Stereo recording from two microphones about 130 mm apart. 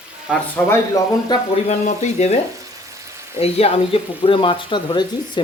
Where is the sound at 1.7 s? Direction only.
60° left (ahead or behind).